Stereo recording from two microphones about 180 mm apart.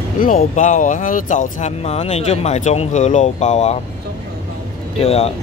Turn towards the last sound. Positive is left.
turn(degrees=35)  # may be behind; listen again after turning